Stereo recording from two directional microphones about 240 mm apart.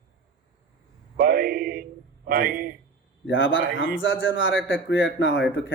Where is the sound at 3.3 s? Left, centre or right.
Left.